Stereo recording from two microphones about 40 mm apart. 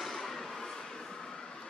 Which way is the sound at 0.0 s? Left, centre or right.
Centre.